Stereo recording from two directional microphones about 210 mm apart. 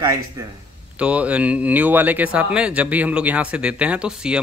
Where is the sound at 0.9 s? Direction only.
5° right (ahead or behind).